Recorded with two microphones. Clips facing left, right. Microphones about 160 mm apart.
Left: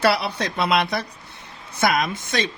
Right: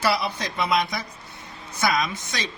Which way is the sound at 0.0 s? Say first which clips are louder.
Left 4 dB; 65° left (ahead or behind).